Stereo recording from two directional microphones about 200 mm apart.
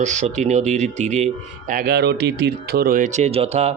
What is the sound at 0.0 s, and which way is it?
A man's voice, 35° right (ahead or behind).